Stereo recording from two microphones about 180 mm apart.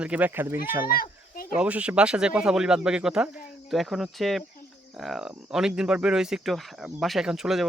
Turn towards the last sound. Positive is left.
turn(degrees=0)  # may be behind; listen again after turning